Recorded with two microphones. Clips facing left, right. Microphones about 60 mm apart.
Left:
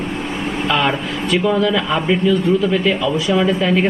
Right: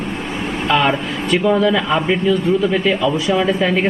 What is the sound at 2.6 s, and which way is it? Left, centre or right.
Speech, right.